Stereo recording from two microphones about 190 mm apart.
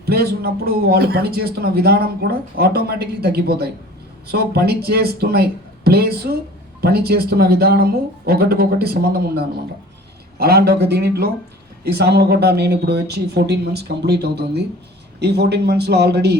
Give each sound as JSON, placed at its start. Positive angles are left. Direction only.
{"t": 0.0, "sound": "speech", "side_deg": -55}